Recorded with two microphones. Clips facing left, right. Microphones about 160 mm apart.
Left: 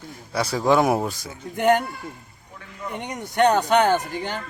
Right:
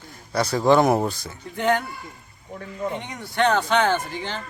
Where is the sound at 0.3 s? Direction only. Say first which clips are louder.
Right 2 dB; 5° left (ahead or behind).